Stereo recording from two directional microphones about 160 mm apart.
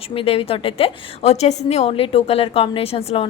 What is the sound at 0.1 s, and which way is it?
A woman's voice, 35° left (ahead or behind).